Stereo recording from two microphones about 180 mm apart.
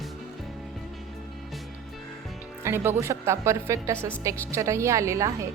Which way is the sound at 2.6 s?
15° right (ahead or behind).